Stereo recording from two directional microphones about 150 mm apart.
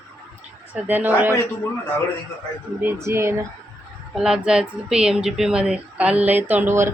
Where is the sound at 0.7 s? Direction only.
10° right (ahead or behind).